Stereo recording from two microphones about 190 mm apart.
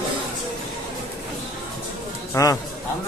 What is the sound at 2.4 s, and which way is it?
Speech, 15° left (ahead or behind).